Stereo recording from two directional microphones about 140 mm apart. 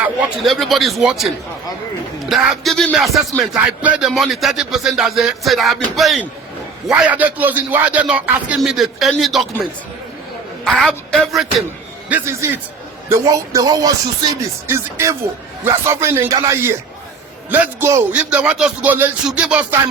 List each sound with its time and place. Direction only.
0.4 s speech: centre (ahead or behind)
2.3 s speech: centre (ahead or behind)
6.8 s a man's voice: 10° right (ahead or behind)
10.6 s a woman's voice: 5° left (ahead or behind)
12.0 s music: 15° right (ahead or behind)
17.5 s a man's voice: 15° right (ahead or behind)